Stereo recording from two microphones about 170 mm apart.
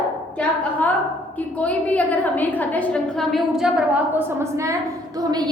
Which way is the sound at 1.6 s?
10° left (ahead or behind).